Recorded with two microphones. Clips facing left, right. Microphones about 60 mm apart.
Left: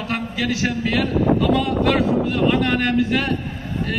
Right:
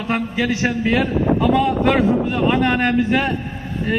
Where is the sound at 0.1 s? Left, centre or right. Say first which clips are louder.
Right 4 dB; right.